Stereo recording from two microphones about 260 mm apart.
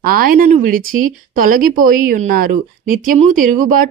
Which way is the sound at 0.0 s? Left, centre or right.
Right.